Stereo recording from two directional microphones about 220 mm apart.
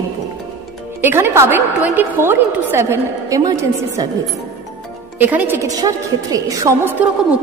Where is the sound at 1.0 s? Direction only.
10° right (ahead or behind).